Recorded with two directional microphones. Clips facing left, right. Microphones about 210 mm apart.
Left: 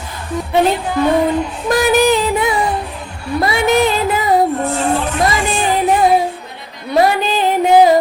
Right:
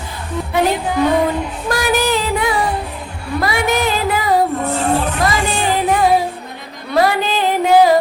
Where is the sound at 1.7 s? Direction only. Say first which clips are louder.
Left 5 dB; 20° left (ahead or behind).